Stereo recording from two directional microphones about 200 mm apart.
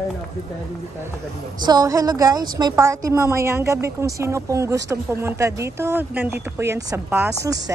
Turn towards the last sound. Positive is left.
turn(degrees=-15)  # may be behind; listen again after turning